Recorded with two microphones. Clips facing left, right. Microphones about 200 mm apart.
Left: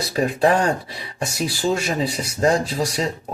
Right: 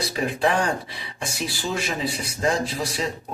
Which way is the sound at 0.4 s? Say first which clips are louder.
Left 4 dB; 40° left (ahead or behind).